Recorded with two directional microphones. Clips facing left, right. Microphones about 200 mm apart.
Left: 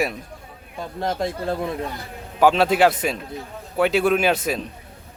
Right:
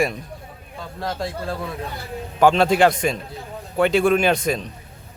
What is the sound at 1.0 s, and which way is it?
Speech, 20° left (ahead or behind).